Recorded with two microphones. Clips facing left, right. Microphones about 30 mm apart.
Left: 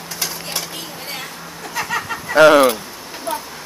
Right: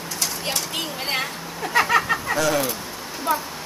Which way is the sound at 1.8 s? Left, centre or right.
Centre.